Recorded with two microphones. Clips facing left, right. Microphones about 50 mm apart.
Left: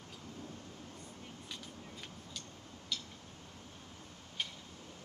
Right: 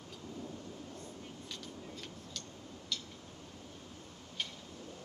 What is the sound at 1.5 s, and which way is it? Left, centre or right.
Vehicle, centre.